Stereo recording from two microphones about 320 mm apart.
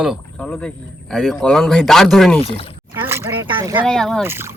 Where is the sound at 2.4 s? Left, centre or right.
Centre.